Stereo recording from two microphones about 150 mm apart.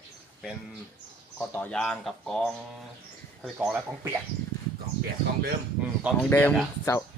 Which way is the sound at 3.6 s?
15° right (ahead or behind).